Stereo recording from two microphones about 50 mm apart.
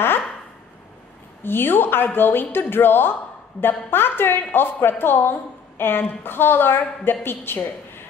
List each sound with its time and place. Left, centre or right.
1.4 s a woman's voice: left